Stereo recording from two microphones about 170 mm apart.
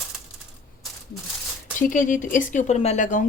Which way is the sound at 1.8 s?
50° left (ahead or behind).